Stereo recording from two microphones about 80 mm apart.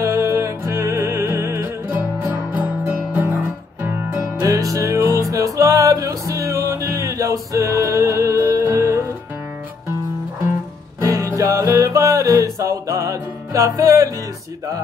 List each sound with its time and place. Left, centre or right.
0.0 s music: right
2.5 s music: centre
4.4 s music: right
11.1 s music: right